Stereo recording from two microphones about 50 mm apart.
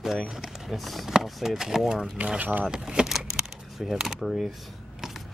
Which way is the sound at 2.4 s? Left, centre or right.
Right.